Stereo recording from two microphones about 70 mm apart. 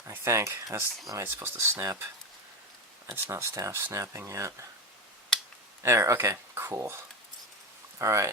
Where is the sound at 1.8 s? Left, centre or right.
Right.